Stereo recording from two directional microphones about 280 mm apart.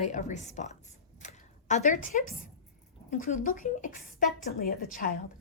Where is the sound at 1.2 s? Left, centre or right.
Left.